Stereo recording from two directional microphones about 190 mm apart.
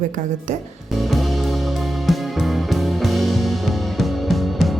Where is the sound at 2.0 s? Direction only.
Centre (ahead or behind).